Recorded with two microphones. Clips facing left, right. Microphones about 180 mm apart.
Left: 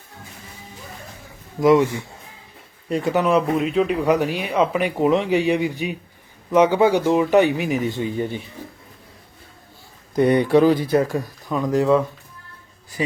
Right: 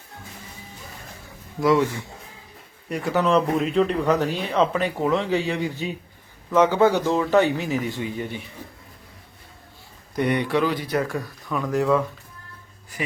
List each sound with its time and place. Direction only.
1.6 s speech: 20° left (ahead or behind)
10.2 s speech: 35° left (ahead or behind)